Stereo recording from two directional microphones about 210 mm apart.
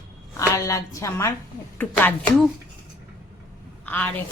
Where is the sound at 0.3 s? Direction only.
15° left (ahead or behind).